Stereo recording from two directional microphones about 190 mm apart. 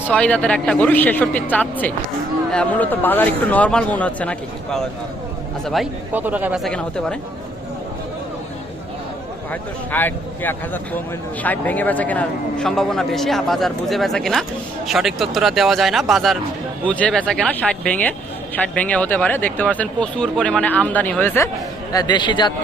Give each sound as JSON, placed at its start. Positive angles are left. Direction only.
{"t": 0.1, "sound": "a man's voice", "side_deg": 5}
{"t": 9.5, "sound": "a man's voice", "side_deg": 10}
{"t": 21.9, "sound": "a man's voice", "side_deg": 20}